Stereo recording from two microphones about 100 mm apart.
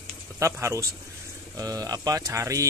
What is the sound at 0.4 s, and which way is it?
Speech, 30° right (ahead or behind).